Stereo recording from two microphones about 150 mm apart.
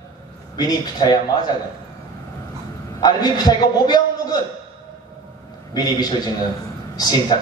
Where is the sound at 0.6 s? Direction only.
25° left (ahead or behind).